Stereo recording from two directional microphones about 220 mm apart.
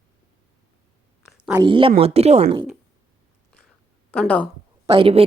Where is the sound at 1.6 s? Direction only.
25° right (ahead or behind).